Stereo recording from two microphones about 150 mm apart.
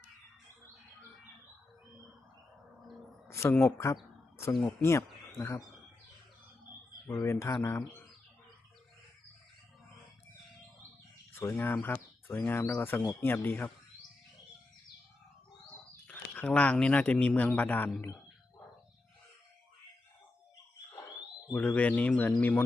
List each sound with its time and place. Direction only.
3.2 s speech: 15° left (ahead or behind)
7.2 s speech: 20° left (ahead or behind)
11.3 s speech: 15° left (ahead or behind)
15.7 s speech: 10° left (ahead or behind)
21.8 s speech: 10° left (ahead or behind)